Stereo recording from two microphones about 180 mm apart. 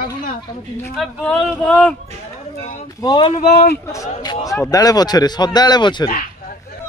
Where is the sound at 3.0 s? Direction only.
25° left (ahead or behind).